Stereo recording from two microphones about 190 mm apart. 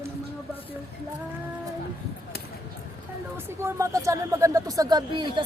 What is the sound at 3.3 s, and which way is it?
Speech, 15° right (ahead or behind).